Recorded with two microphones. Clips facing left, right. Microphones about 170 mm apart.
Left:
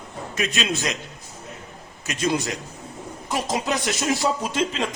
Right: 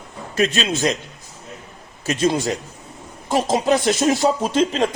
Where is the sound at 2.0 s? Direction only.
30° right (ahead or behind).